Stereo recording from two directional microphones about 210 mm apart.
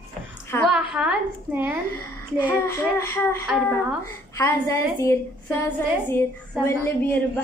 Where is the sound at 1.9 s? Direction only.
10° left (ahead or behind).